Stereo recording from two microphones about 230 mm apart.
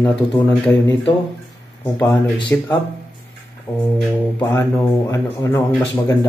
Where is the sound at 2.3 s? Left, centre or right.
Centre.